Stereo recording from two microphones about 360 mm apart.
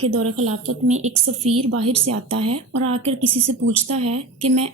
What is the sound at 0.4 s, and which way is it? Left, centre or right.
Speech, centre.